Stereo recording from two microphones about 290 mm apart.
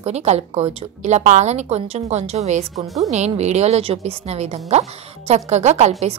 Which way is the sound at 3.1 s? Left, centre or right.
Right.